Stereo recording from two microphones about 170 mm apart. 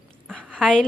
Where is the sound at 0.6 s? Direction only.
5° left (ahead or behind).